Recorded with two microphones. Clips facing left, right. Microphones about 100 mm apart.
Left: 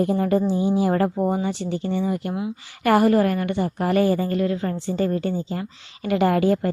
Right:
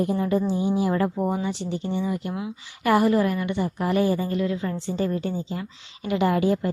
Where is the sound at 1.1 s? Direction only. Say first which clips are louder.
Left 3 dB; 25° left (ahead or behind).